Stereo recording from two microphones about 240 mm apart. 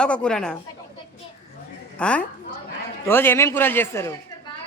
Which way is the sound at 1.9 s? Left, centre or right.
Centre.